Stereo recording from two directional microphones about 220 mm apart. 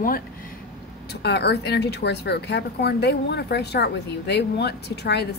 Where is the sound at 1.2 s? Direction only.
50° left (ahead or behind).